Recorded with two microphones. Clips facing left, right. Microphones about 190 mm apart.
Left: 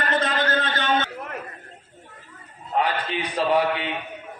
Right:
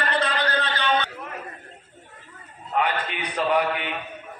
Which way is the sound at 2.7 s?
30° left (ahead or behind).